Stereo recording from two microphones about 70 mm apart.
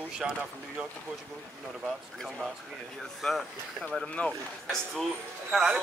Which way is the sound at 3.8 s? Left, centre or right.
Centre.